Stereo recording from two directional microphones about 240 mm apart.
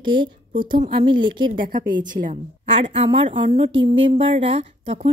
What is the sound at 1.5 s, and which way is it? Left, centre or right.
Speech, right.